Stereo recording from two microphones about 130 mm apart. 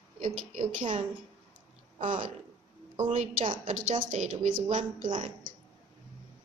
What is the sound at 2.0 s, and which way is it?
A woman's voice, 75° right (ahead or behind).